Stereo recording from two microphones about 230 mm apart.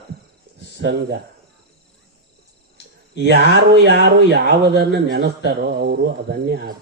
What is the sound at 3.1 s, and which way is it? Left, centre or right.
A man's voice, right.